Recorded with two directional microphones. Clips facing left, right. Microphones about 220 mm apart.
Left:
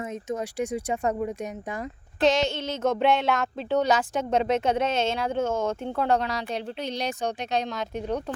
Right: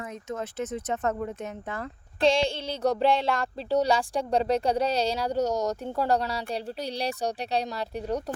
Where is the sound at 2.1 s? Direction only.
30° right (ahead or behind).